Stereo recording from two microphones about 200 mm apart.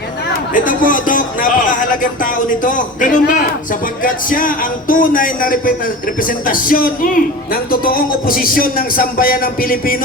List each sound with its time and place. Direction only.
0.5 s speech: 40° left (ahead or behind)